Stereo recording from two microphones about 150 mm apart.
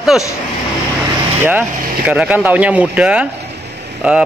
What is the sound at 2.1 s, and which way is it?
A man's voice, 10° right (ahead or behind).